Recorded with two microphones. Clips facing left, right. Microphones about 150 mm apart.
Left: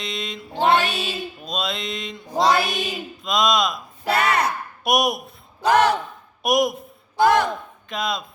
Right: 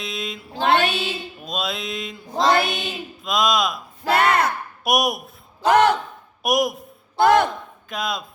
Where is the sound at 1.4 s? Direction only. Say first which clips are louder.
Right 1 dB; centre (ahead or behind).